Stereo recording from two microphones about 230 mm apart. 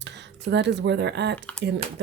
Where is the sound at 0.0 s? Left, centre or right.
Right.